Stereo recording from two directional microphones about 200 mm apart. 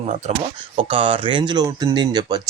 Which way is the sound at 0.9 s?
25° right (ahead or behind).